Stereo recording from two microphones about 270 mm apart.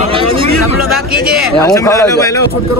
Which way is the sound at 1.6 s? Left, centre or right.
Centre.